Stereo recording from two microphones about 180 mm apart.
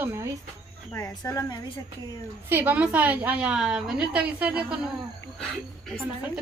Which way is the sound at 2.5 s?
10° right (ahead or behind).